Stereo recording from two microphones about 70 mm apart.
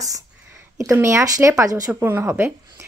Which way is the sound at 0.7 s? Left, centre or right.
Right.